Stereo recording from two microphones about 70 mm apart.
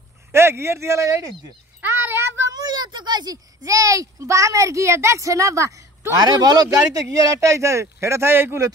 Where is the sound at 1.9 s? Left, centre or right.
Right.